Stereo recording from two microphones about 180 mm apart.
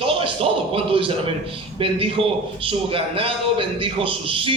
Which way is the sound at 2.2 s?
30° right (ahead or behind).